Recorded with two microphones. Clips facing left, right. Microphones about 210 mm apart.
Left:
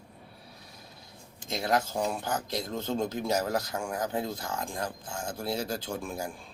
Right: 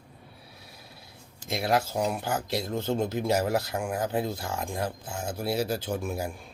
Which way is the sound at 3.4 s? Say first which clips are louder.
Right 3 dB; 10° right (ahead or behind).